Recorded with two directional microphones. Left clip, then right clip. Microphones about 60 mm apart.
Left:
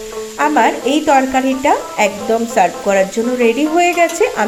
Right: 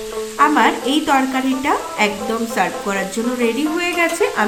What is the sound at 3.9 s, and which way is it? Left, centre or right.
Speech, left.